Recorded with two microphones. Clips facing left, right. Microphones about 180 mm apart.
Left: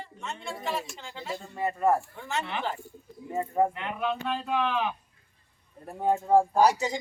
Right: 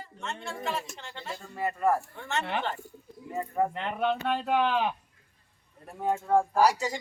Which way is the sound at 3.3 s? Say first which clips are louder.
Left 3 dB; 25° left (ahead or behind).